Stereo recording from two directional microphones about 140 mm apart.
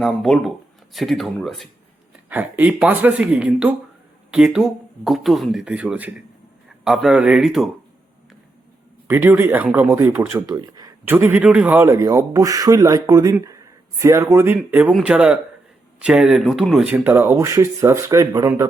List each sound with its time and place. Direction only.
0.0 s speech: centre (ahead or behind)
2.3 s speech: 10° right (ahead or behind)
9.0 s speech: 15° right (ahead or behind)
11.0 s speech: 15° right (ahead or behind)